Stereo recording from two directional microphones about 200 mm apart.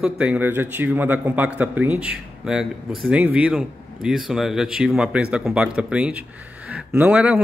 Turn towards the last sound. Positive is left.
turn(degrees=-5)  # may be behind; listen again after turning